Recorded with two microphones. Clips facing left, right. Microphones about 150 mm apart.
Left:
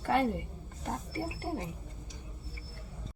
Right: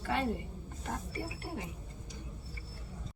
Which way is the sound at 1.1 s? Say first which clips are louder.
Left 5 dB; 35° left (ahead or behind).